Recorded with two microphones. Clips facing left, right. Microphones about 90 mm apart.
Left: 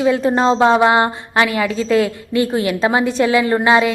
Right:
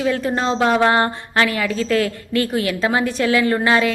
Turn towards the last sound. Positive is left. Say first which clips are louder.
# left 3 dB
turn(degrees=20)  # may be behind; listen again after turning